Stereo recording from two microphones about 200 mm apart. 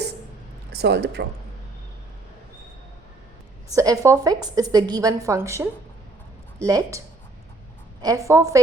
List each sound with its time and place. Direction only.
0.7 s speech: 55° right (ahead or behind)
3.8 s a woman's voice: 15° right (ahead or behind)
8.0 s a woman's voice: 15° right (ahead or behind)